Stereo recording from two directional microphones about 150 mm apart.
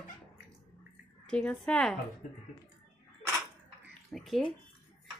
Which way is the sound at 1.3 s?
5° left (ahead or behind).